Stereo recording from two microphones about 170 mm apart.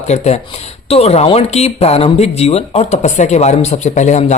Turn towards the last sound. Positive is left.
turn(degrees=45)  # may be behind; listen again after turning